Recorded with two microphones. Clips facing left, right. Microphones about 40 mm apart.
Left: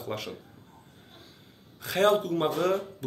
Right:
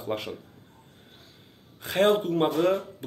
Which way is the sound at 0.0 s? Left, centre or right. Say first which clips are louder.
Right 4 dB; right.